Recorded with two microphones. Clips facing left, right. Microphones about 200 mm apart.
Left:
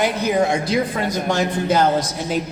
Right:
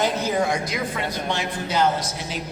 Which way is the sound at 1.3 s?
50° left (ahead or behind).